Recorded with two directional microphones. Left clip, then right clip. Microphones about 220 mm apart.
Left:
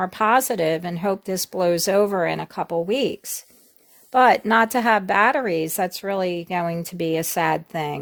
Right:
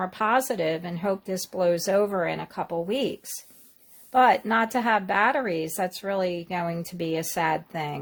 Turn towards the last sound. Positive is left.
turn(degrees=35)  # may be behind; listen again after turning